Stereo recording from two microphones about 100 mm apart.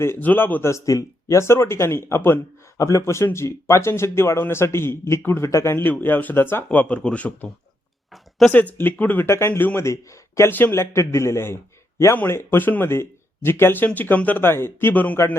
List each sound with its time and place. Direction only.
0.0 s speech: 20° left (ahead or behind)
8.4 s speech: centre (ahead or behind)
8.8 s speech: 15° left (ahead or behind)